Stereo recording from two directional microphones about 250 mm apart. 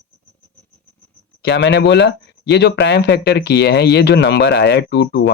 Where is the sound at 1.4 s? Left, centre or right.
Left.